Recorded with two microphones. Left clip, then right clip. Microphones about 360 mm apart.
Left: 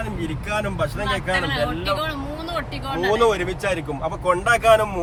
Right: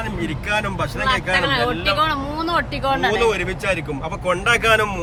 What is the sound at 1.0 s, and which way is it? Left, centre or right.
Speech, centre.